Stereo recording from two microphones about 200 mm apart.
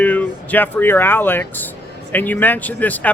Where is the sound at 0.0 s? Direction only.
10° left (ahead or behind).